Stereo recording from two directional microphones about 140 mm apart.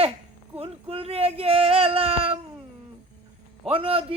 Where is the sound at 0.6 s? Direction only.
45° right (ahead or behind).